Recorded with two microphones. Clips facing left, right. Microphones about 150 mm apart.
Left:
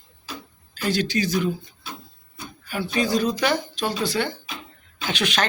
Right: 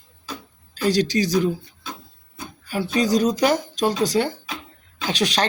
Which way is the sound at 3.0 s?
40° right (ahead or behind).